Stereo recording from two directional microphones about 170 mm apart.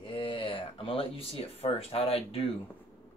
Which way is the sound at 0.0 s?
30° left (ahead or behind).